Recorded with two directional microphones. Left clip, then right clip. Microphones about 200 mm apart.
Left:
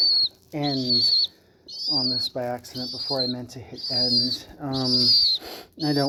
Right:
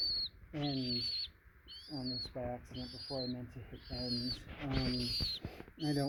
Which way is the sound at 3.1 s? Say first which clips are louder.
Left 15 dB; 25° right (ahead or behind).